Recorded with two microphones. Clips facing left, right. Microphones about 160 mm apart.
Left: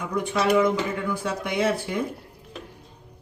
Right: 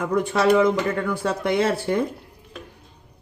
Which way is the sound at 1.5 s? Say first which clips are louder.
Even; 65° right (ahead or behind).